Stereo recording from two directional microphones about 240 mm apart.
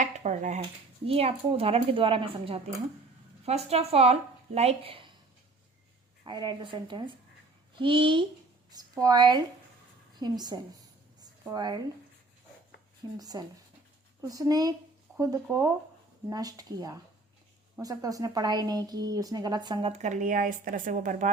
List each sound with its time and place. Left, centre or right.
0.0 s dishes: right
1.0 s speech: right
6.2 s a woman's voice: centre
11.2 s a sound: centre
13.1 s a woman's voice: centre; by 21.2 s right